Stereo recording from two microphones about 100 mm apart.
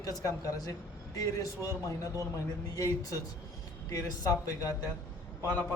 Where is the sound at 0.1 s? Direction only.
35° left (ahead or behind).